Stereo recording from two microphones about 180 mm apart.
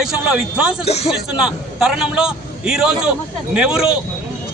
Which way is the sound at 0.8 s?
35° left (ahead or behind).